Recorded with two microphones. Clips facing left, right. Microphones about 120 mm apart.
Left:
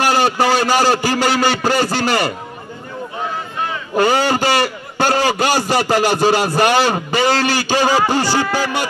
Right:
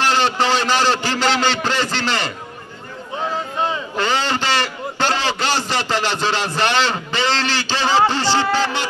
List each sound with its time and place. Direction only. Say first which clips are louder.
0.0 s a man's voice: left 3 dB; 10° left (ahead or behind)
3.9 s a man's voice: left 10 dB; 45° left (ahead or behind)
4.4 s a sound: left 4 dB; 10° left (ahead or behind)
5.8 s a man's voice: left 6 dB; 10° left (ahead or behind)